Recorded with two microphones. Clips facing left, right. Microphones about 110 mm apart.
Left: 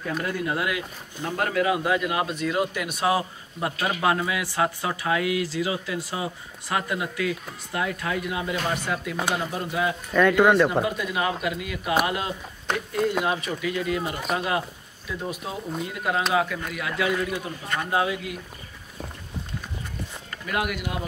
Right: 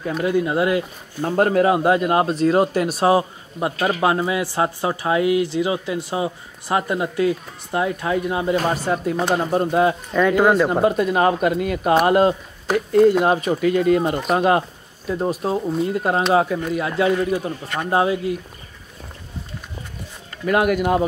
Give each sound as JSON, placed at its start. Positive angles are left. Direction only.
{"t": 0.5, "sound": "speech", "side_deg": -30}
{"t": 10.1, "sound": "speech", "side_deg": -10}
{"t": 10.7, "sound": "speech", "side_deg": -45}
{"t": 20.4, "sound": "speech", "side_deg": -45}